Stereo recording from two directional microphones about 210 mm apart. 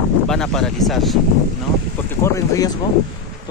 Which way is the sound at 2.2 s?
15° left (ahead or behind).